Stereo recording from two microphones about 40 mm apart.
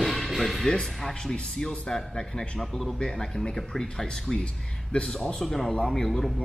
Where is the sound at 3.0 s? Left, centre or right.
Centre.